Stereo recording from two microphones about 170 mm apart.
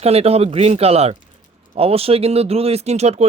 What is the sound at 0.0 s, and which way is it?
Speech, 35° right (ahead or behind).